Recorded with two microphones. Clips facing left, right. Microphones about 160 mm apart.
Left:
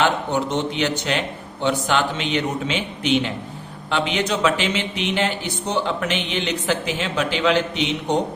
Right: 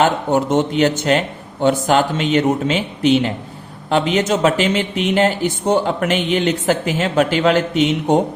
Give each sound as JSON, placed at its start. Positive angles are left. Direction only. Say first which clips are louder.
{"t": 0.0, "sound": "speech", "louder": "right 5 dB", "side_deg": -45}